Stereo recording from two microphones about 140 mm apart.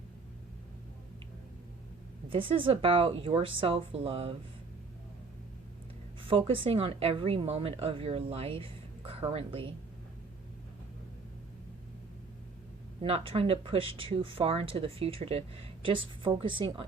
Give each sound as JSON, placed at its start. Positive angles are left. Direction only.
{"t": 2.3, "sound": "speech", "side_deg": -40}
{"t": 6.2, "sound": "a woman's voice", "side_deg": -40}
{"t": 13.0, "sound": "speech", "side_deg": -45}